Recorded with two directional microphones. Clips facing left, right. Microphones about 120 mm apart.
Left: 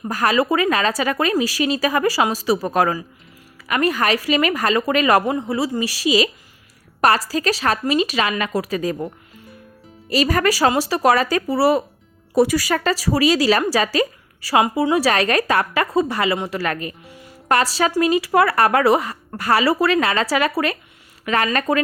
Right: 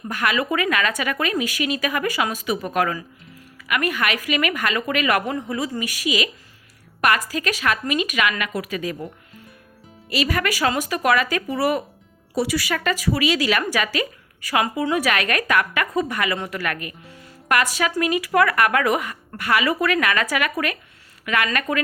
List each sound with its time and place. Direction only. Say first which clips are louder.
0.1 s a woman's voice: left 5 dB; 35° left (ahead or behind)
5.2 s a woman's voice: left 4 dB; 20° left (ahead or behind)
12.3 s a woman's voice: left 6 dB; 50° left (ahead or behind); by 21.8 s 30° left (ahead or behind)